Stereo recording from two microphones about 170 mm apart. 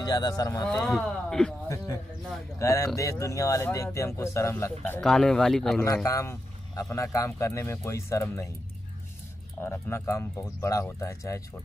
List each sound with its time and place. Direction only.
0.0 s speech: 25° left (ahead or behind)
0.7 s speech: centre (ahead or behind)
2.6 s a man's voice: 20° left (ahead or behind); by 5.9 s 5° left (ahead or behind)
6.0 s a man's voice: 20° left (ahead or behind)
9.6 s a man's voice: 15° left (ahead or behind)